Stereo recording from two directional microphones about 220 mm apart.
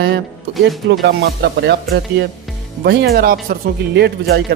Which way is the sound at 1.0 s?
50° right (ahead or behind).